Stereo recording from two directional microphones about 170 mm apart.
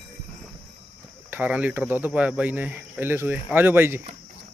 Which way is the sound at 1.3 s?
10° right (ahead or behind).